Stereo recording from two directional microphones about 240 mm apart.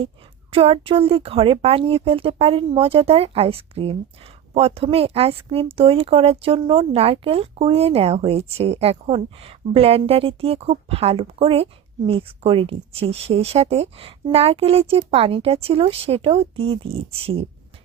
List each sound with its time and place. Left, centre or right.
0.5 s speech: right